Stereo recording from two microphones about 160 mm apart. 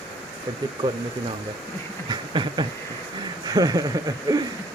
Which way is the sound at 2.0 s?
30° right (ahead or behind).